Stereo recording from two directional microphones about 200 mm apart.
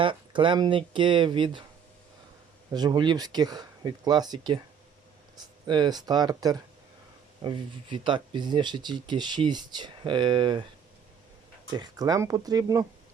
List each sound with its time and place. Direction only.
0.0 s speech: 25° right (ahead or behind)
2.7 s speech: 20° right (ahead or behind)
11.7 s speech: 20° right (ahead or behind)